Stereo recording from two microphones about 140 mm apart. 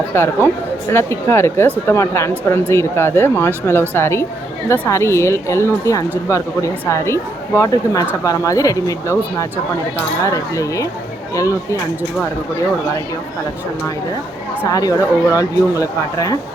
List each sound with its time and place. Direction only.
0.1 s a woman's voice: 15° left (ahead or behind)
14.7 s a woman's voice: 25° left (ahead or behind)